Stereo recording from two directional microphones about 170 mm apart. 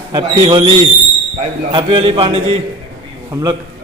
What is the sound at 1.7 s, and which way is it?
Speech, 30° right (ahead or behind).